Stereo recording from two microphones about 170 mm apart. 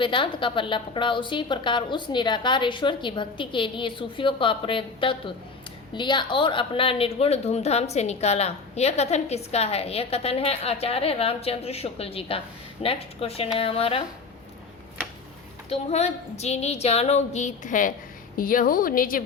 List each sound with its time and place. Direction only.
0.0 s a woman's voice: 30° left (ahead or behind)
15.7 s a woman's voice: 40° left (ahead or behind); by 19.2 s 55° left (ahead or behind)